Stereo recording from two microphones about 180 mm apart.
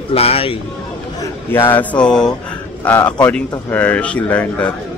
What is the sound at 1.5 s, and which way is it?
A man's voice, 10° left (ahead or behind).